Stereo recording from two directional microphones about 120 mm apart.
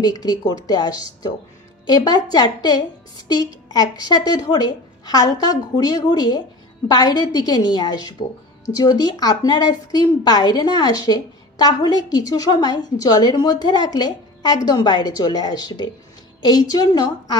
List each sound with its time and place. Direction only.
0.0 s a woman's voice: 35° left (ahead or behind)